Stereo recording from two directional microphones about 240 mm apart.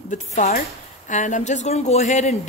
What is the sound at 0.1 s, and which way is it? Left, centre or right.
Speech, left.